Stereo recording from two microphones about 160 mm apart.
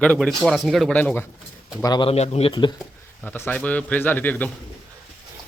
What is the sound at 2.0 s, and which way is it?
Speech, 40° left (ahead or behind).